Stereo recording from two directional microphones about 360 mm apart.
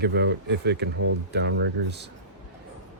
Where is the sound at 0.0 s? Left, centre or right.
Right.